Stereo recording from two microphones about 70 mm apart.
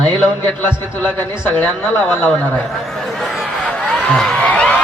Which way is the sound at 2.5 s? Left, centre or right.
Centre.